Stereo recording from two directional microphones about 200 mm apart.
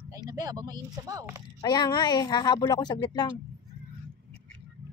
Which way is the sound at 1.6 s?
20° left (ahead or behind).